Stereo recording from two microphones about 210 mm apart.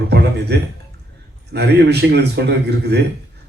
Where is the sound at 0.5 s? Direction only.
50° right (ahead or behind).